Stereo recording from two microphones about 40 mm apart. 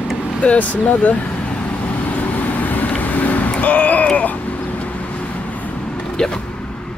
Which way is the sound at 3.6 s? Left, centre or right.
Left.